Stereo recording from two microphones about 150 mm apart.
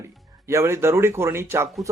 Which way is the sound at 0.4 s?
20° right (ahead or behind).